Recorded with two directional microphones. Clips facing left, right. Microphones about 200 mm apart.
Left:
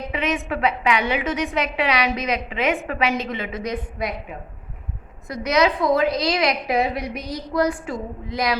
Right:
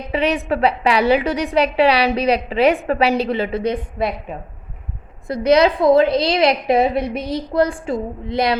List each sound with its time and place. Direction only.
0.1 s a woman's voice: 35° right (ahead or behind)